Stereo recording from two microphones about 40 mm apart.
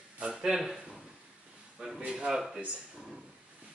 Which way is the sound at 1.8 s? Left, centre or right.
Centre.